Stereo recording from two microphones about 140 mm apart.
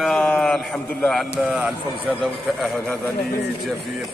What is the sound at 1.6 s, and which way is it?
Mantra, 5° right (ahead or behind).